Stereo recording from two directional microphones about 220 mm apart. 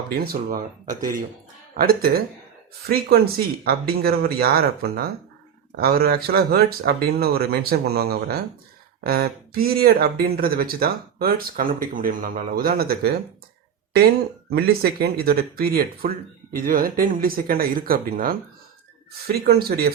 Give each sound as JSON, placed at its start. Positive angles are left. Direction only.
{"t": 0.1, "sound": "speech", "side_deg": -45}
{"t": 3.6, "sound": "speech", "side_deg": -45}
{"t": 14.5, "sound": "speech", "side_deg": -45}